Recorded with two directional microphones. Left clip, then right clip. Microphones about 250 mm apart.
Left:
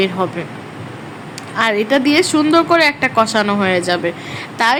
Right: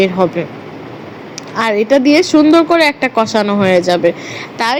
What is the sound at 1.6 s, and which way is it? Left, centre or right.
A woman's voice, centre.